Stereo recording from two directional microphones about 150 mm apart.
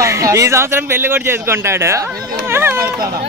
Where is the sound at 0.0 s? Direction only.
20° right (ahead or behind).